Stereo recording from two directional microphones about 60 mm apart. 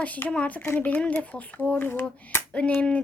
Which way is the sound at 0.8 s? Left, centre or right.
Left.